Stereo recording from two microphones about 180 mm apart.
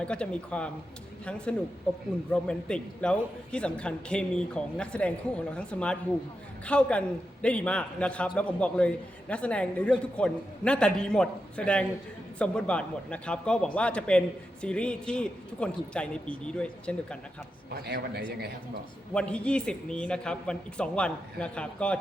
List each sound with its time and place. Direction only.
0.0 s a man's voice: 5° left (ahead or behind)
17.7 s a man's voice: 60° right (ahead or behind)
19.1 s a man's voice: 5° left (ahead or behind)